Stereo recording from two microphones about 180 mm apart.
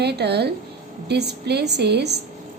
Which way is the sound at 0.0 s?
65° right (ahead or behind).